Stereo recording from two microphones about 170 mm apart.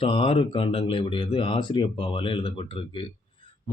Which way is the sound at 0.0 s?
30° left (ahead or behind).